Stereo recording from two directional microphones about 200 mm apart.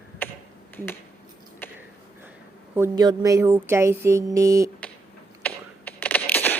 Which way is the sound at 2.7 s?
15° right (ahead or behind).